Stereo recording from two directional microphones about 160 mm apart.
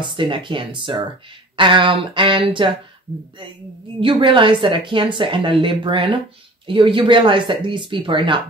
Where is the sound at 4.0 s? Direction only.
30° right (ahead or behind).